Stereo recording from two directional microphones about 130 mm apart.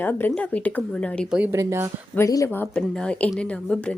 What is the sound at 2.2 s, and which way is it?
A woman's voice, 25° left (ahead or behind).